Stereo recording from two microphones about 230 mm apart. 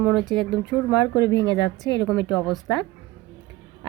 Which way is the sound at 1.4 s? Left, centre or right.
Centre.